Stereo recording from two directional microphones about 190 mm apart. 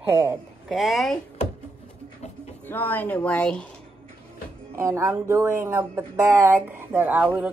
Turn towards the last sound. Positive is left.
turn(degrees=-10)  # may be behind; listen again after turning